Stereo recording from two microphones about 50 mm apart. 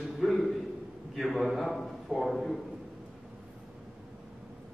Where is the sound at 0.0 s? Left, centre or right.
Centre.